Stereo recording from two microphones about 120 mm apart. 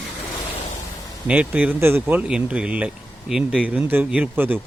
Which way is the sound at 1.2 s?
10° right (ahead or behind).